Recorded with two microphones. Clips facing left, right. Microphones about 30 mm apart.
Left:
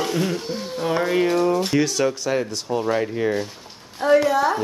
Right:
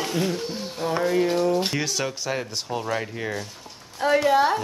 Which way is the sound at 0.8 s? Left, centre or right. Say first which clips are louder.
Left 2 dB; left.